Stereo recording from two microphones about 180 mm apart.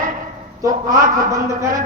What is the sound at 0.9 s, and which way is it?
Speech, 50° right (ahead or behind).